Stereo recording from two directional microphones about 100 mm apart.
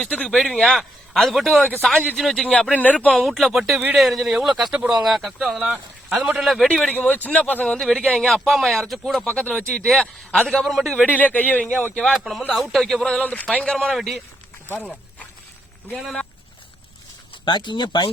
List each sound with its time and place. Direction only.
0.0 s a man's voice: 10° left (ahead or behind)
3.1 s a man's voice: centre (ahead or behind)
10.9 s a man's voice: 15° left (ahead or behind)
11.9 s a man's voice: 5° left (ahead or behind)
13.2 s a man's voice: 15° left (ahead or behind)
14.7 s speech: 20° left (ahead or behind)
17.4 s speech: 50° left (ahead or behind)